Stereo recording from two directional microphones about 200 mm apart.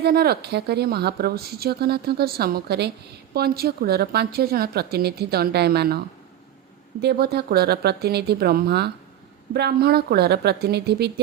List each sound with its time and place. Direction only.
0.0 s a woman's voice: 50° right (ahead or behind)
7.0 s a woman's voice: 55° right (ahead or behind)